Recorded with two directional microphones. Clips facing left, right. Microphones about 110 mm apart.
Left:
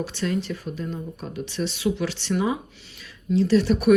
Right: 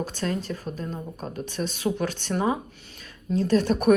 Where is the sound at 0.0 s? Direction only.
45° right (ahead or behind).